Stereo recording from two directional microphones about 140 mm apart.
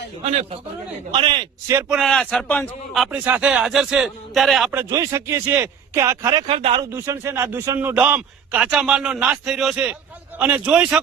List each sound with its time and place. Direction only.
1.1 s a man's voice: 35° right (ahead or behind)
1.9 s a man's voice: centre (ahead or behind)
4.7 s a man's voice: 15° right (ahead or behind)
6.5 s a man's voice: 45° right (ahead or behind)
6.9 s a man's voice: 20° right (ahead or behind)